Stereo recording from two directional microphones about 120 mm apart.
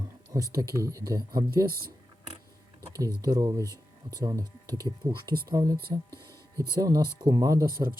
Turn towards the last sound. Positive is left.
turn(degrees=-30)  # may be behind; listen again after turning